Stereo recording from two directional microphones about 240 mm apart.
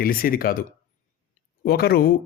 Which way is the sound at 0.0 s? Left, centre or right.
Left.